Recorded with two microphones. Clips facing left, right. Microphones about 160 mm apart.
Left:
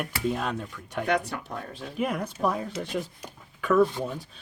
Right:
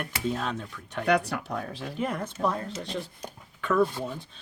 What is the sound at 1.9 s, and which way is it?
Speech, 5° left (ahead or behind).